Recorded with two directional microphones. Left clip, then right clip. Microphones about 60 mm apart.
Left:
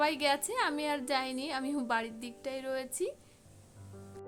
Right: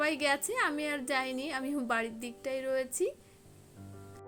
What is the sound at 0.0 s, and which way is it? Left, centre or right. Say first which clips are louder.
A woman's voice: even; centre.